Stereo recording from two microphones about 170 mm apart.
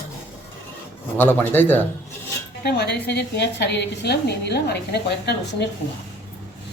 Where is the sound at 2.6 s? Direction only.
75° left (ahead or behind).